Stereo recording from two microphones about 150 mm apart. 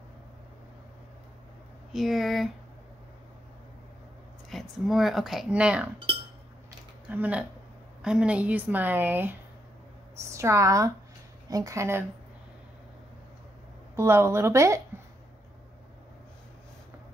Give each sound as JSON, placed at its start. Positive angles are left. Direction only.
{"t": 1.9, "sound": "speech", "side_deg": 0}
{"t": 4.5, "sound": "speech", "side_deg": 0}
{"t": 7.1, "sound": "a woman's voice", "side_deg": -10}
{"t": 13.9, "sound": "a woman's voice", "side_deg": -15}